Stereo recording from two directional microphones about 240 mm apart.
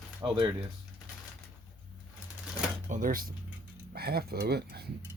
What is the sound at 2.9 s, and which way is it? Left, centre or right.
Speech, right.